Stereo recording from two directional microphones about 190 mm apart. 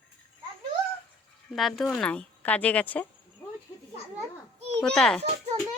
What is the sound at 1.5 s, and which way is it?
Speech, centre (ahead or behind).